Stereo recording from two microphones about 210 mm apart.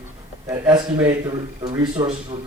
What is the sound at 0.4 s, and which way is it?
A man's voice, 15° right (ahead or behind).